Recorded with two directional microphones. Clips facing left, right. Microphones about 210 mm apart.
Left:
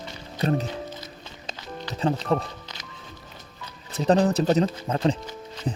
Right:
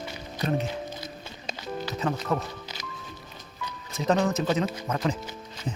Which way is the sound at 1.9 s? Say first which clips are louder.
Left 5 dB; 30° left (ahead or behind).